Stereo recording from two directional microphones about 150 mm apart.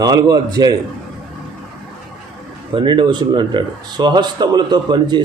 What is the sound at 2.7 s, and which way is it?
Speech, 35° right (ahead or behind).